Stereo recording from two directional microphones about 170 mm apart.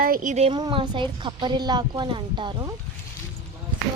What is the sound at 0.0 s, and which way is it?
Speech, 55° right (ahead or behind).